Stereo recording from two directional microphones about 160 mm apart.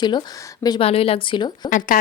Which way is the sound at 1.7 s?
55° left (ahead or behind).